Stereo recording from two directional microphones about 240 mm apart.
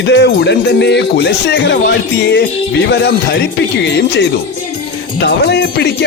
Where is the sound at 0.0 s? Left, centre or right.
Left.